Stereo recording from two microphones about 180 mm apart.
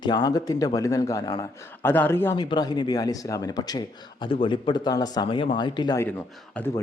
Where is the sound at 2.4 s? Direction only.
25° left (ahead or behind).